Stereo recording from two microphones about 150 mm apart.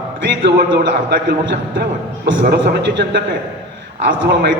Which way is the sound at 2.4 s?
90° right.